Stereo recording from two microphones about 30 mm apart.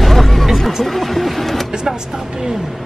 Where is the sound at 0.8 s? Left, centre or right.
Centre.